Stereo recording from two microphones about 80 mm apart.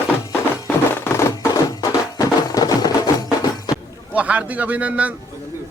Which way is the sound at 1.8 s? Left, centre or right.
Left.